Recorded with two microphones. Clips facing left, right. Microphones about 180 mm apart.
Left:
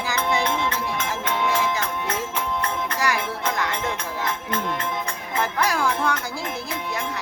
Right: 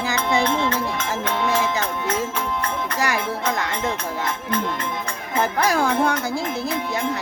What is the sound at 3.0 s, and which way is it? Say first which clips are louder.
Music: right 2 dB; 25° right (ahead or behind).